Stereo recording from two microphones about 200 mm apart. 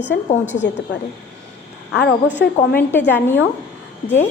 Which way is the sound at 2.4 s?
55° left (ahead or behind).